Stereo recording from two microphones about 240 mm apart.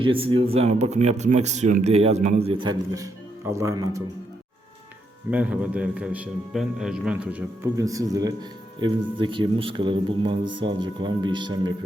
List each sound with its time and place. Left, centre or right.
0.0 s a man's voice: right
5.3 s a man's voice: centre